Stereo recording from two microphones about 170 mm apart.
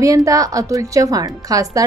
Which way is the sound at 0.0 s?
20° right (ahead or behind).